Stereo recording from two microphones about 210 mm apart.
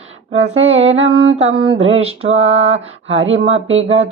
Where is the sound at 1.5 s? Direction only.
70° right (ahead or behind).